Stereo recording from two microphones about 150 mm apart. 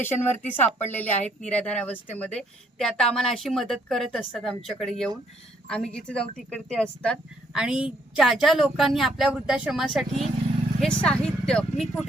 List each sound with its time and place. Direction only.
0.5 s speech: 10° left (ahead or behind)
1.1 s speech: 50° left (ahead or behind)
1.5 s a woman's voice: 10° left (ahead or behind)